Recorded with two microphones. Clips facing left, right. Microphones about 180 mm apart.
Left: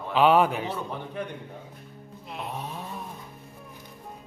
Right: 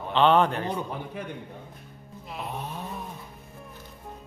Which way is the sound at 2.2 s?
Centre (ahead or behind).